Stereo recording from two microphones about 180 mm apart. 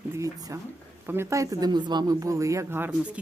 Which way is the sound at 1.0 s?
15° right (ahead or behind).